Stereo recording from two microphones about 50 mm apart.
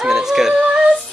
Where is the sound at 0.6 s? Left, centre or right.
Right.